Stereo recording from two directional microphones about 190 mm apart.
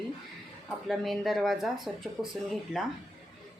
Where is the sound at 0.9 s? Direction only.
Centre (ahead or behind).